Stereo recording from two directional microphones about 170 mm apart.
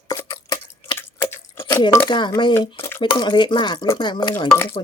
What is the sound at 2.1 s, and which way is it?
Speech, 25° left (ahead or behind).